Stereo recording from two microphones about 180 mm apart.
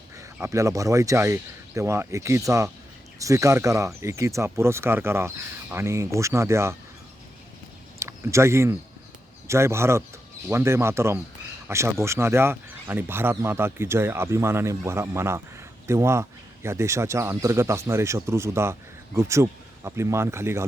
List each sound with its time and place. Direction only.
0.2 s speech: 15° right (ahead or behind)
7.9 s a sound: 15° right (ahead or behind)
9.5 s speech: 15° right (ahead or behind)